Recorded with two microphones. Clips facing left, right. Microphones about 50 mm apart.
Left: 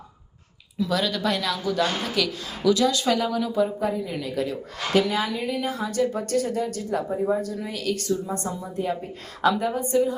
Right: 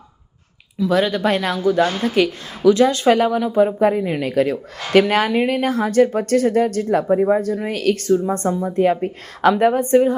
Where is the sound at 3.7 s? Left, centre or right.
Right.